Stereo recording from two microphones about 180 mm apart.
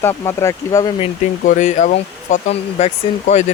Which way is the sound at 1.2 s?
45° left (ahead or behind).